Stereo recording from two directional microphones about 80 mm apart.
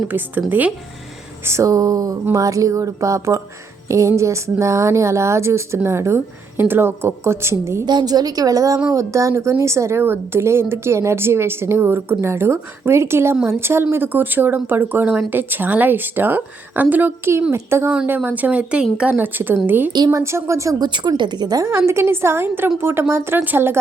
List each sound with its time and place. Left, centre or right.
0.1 s speech: right
1.5 s speech: right
7.9 s speech: right
17.5 s speech: right; by 19.1 s centre
19.1 s speech: right
20.1 s speech: right
20.7 s a woman's voice: right
21.8 s speech: right